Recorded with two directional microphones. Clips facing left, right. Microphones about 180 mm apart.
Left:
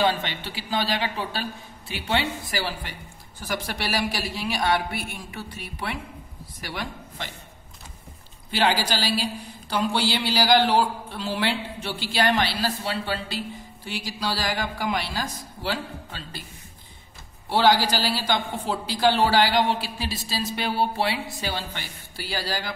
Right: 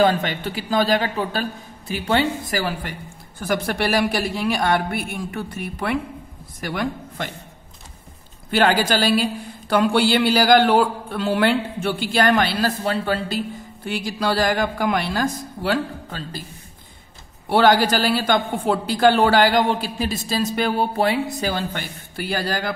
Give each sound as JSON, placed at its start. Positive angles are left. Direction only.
{"t": 0.0, "sound": "a man's voice", "side_deg": -45}
{"t": 8.5, "sound": "a man's voice", "side_deg": -50}
{"t": 17.5, "sound": "a man's voice", "side_deg": -55}